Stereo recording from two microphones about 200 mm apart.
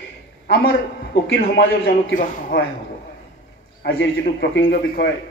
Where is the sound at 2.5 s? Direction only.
50° left (ahead or behind).